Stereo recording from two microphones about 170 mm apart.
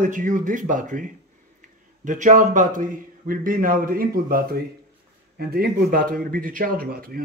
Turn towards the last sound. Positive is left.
turn(degrees=-60)  # may be behind; listen again after turning